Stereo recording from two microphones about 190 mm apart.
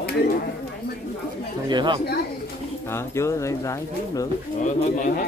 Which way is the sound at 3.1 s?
15° left (ahead or behind).